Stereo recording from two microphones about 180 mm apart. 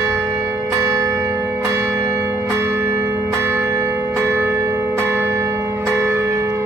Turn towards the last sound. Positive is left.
turn(degrees=-15)  # may be behind; listen again after turning